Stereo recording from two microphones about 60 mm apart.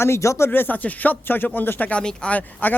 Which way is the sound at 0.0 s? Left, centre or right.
Left.